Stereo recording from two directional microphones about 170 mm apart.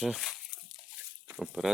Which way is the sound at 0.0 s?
Centre (ahead or behind).